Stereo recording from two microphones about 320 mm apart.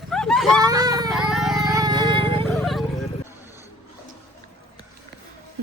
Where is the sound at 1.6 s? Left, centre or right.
Centre.